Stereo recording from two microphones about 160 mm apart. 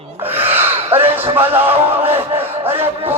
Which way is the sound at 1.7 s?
35° right (ahead or behind).